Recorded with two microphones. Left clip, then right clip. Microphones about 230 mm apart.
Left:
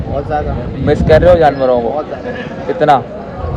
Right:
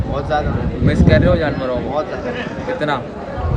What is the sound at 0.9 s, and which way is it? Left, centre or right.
Speech, centre.